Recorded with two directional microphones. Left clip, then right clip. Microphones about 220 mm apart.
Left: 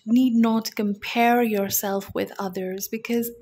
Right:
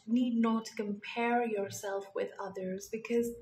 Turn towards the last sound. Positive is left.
turn(degrees=40)  # may be behind; listen again after turning